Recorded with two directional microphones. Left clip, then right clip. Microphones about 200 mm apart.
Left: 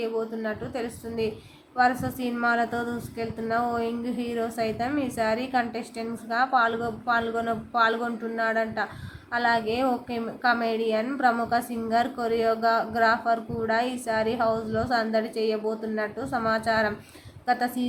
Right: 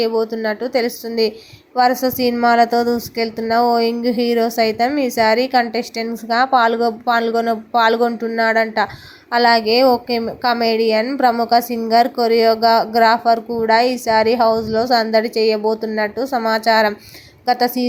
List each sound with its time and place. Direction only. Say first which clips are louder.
0.0 s a woman's voice: right 11 dB; 30° right (ahead or behind)